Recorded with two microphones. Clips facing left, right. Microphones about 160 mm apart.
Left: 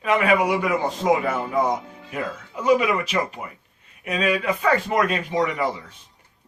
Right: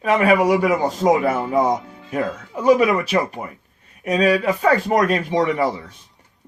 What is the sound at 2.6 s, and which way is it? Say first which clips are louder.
A man's voice: right 4 dB; 40° right (ahead or behind).